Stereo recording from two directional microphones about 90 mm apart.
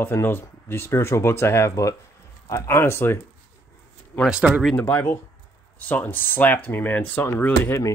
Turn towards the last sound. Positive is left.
turn(degrees=20)  # may be behind; listen again after turning